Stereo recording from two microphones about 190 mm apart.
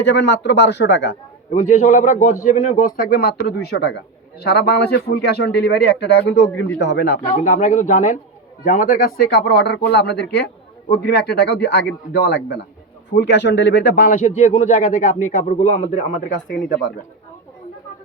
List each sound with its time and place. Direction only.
0.0 s speech: 65° left (ahead or behind)
1.7 s a man's voice: 40° left (ahead or behind); by 7.2 s 60° left (ahead or behind)
7.4 s a man's voice: 40° left (ahead or behind)